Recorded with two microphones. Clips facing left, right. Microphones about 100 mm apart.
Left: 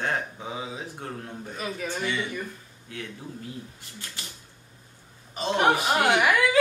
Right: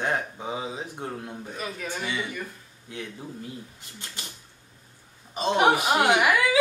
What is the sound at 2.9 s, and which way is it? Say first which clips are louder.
Speech: right 1 dB; 20° right (ahead or behind).